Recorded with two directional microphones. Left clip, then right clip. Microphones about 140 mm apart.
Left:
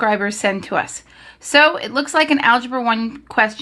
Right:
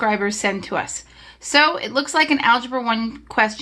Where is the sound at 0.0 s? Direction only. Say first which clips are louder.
Left 2 dB; 25° left (ahead or behind).